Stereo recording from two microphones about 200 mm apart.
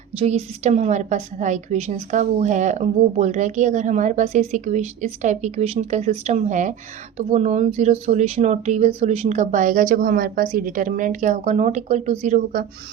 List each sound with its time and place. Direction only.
0.2 s a woman's voice: 30° right (ahead or behind)